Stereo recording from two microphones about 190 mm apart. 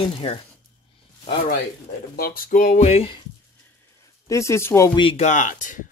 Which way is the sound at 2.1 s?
50° left (ahead or behind).